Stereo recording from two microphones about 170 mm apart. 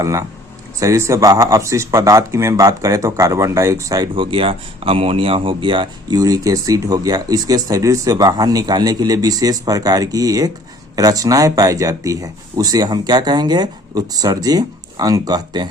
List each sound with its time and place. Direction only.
0.0 s speech: 20° right (ahead or behind)